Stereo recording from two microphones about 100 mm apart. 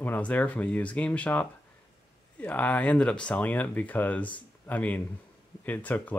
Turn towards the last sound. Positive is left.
turn(degrees=15)  # may be behind; listen again after turning